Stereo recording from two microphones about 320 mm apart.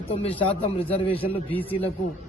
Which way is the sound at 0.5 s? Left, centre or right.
Centre.